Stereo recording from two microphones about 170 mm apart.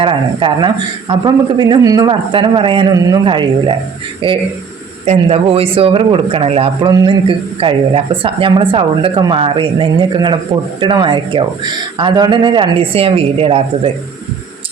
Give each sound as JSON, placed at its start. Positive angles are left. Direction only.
{"t": 0.0, "sound": "a man's voice", "side_deg": -30}